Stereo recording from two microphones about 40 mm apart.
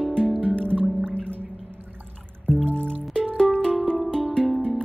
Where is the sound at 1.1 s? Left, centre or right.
Left.